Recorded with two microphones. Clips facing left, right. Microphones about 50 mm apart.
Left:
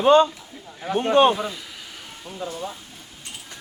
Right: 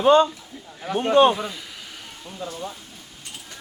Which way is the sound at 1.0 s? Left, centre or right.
Left.